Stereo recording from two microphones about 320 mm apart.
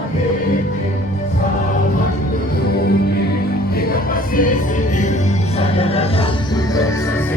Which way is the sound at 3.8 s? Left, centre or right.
Left.